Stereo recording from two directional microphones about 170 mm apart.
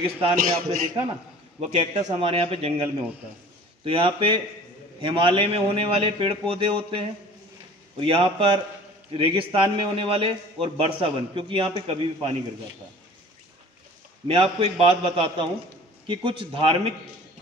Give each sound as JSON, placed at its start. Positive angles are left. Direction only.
{"t": 0.4, "sound": "a man's voice", "side_deg": -55}
{"t": 1.7, "sound": "a man's voice", "side_deg": -35}
{"t": 14.2, "sound": "a man's voice", "side_deg": -35}